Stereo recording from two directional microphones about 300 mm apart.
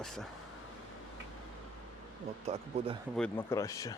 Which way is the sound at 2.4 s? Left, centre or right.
Right.